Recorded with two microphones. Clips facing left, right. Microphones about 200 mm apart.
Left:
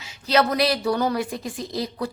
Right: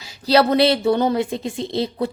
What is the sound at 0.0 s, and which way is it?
A woman's voice, 35° right (ahead or behind).